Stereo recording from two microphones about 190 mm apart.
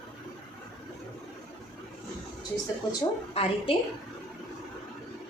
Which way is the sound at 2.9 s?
30° left (ahead or behind).